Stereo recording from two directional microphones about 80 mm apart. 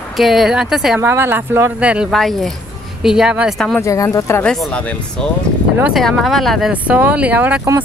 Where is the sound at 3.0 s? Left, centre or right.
Centre.